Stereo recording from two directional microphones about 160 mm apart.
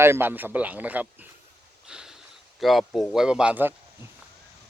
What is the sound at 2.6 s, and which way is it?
A man's voice, centre (ahead or behind).